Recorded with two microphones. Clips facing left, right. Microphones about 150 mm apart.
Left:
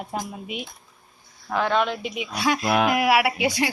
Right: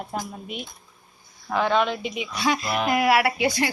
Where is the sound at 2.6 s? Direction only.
75° left (ahead or behind).